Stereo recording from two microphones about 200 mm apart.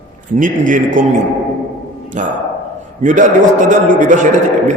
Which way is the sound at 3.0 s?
40° right (ahead or behind).